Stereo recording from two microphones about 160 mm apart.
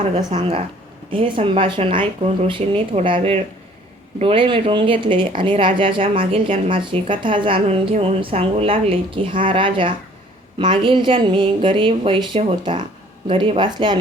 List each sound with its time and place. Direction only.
0.3 s a woman's voice: 35° right (ahead or behind)